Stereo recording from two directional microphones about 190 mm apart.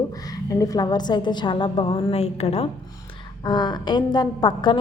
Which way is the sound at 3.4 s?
20° left (ahead or behind).